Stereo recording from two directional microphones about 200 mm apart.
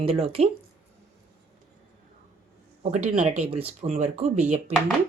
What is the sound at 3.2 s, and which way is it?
Speech, 30° right (ahead or behind).